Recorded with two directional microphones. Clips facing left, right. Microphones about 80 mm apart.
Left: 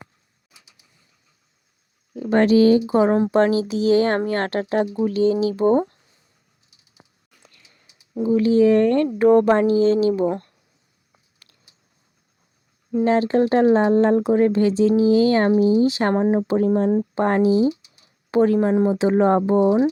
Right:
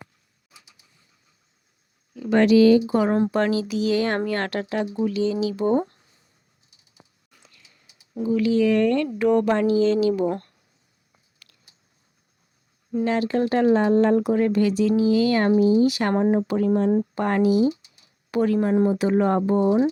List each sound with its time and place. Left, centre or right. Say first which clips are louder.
2.1 s speech: left 1 dB; left
8.1 s speech: left 4 dB; left
11.4 s a sound: right 2 dB; left
12.9 s speech: left 4 dB; left